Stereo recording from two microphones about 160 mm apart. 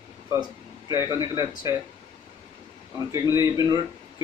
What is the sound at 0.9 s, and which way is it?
Speech, 20° right (ahead or behind).